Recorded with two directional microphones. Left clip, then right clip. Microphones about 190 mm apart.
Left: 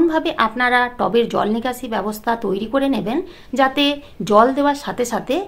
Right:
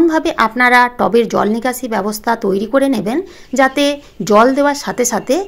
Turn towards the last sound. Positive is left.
turn(degrees=-25)  # may be behind; listen again after turning